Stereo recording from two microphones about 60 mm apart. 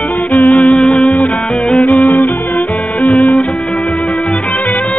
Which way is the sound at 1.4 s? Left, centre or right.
Centre.